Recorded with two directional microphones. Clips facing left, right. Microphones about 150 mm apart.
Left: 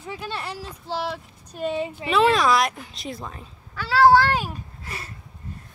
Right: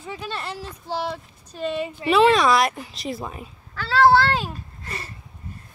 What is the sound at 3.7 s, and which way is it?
Speech, 10° left (ahead or behind).